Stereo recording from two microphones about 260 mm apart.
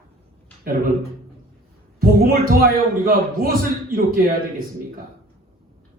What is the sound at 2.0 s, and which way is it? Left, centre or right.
A man's voice, right.